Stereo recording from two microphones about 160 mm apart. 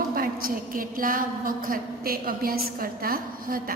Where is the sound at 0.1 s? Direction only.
65° right (ahead or behind).